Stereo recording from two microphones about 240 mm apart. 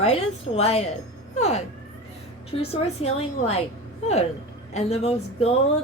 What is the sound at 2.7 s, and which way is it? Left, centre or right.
Speech, left.